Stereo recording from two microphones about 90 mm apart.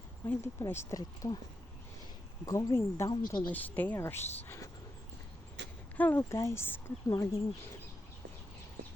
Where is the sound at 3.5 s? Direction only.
20° left (ahead or behind).